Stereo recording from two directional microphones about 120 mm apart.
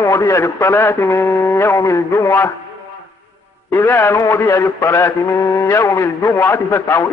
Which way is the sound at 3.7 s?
20° left (ahead or behind).